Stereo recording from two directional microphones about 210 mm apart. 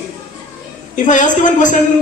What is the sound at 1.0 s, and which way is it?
Speech, 35° left (ahead or behind).